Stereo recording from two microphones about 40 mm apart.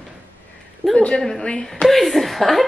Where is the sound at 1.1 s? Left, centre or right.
Centre.